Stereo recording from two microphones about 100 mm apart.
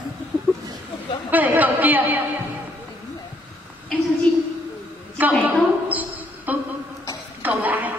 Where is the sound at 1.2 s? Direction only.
15° right (ahead or behind).